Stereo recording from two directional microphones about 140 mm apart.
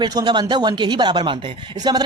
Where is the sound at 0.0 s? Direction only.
30° right (ahead or behind).